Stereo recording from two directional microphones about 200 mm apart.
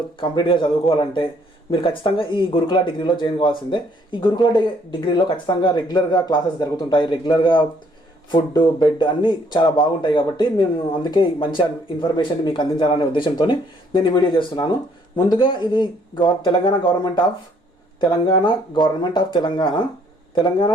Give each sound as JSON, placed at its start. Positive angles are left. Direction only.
{"t": 0.2, "sound": "speech", "side_deg": 25}